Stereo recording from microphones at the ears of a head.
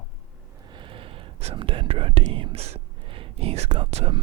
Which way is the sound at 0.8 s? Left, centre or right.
Right.